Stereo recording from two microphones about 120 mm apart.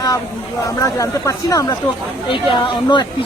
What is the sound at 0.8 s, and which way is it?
Speech, 25° left (ahead or behind).